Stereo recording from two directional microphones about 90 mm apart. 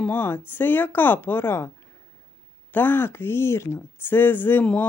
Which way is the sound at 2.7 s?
20° left (ahead or behind).